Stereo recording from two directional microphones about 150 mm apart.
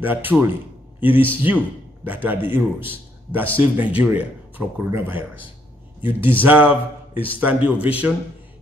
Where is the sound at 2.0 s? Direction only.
10° right (ahead or behind).